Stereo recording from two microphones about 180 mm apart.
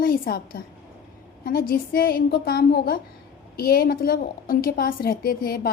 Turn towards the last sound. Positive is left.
turn(degrees=55)  # may be behind; listen again after turning